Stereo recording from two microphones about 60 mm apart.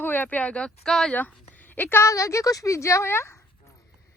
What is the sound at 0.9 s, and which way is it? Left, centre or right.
Speech, centre.